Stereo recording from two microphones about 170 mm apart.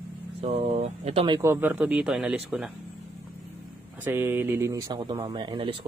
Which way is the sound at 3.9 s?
10° right (ahead or behind).